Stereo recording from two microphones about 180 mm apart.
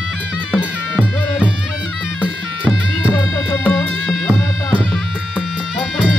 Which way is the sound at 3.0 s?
10° left (ahead or behind).